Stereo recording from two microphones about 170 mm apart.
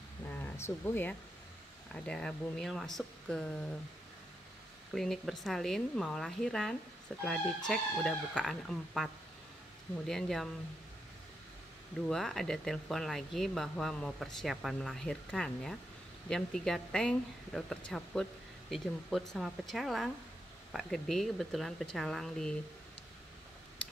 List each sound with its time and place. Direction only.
0.3 s speech: 15° left (ahead or behind)
4.9 s speech: centre (ahead or behind)
12.1 s speech: centre (ahead or behind)
23.8 s a sound: 5° left (ahead or behind)